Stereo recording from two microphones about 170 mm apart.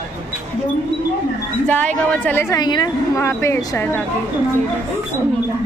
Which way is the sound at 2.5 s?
25° left (ahead or behind).